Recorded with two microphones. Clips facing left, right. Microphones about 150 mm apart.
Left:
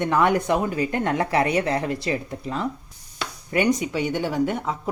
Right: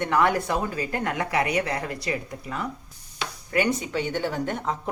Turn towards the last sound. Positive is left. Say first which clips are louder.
# left 4 dB
turn(degrees=10)  # may be behind; listen again after turning